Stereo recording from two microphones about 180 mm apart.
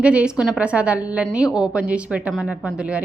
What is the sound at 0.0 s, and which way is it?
A woman's voice, 5° right (ahead or behind).